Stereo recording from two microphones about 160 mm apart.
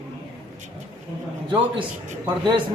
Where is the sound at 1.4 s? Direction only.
30° right (ahead or behind).